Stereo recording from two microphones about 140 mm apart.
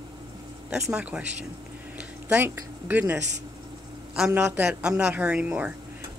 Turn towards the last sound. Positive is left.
turn(degrees=-10)  # may be behind; listen again after turning